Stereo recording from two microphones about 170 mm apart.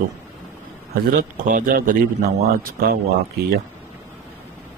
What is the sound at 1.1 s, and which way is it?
Speech, 55° right (ahead or behind).